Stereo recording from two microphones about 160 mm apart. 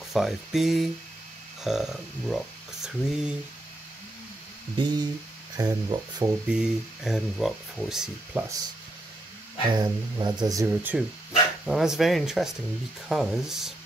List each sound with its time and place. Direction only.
0.1 s speech: centre (ahead or behind)
4.7 s speech: 30° right (ahead or behind)
6.5 s speech: 5° right (ahead or behind)
9.7 s speech: 25° right (ahead or behind)
10.7 s speech: 10° right (ahead or behind)